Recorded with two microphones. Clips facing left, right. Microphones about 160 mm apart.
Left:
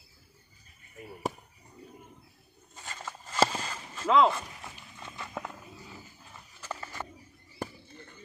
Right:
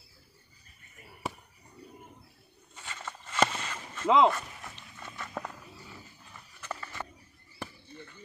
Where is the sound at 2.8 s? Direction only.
40° left (ahead or behind).